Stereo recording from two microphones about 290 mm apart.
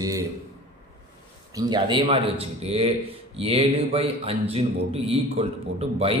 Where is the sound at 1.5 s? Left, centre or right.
Centre.